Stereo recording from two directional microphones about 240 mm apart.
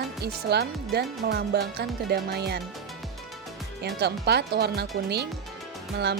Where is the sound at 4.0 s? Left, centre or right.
Right.